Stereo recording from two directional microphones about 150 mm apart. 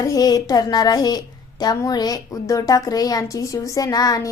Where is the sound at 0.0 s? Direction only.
25° left (ahead or behind).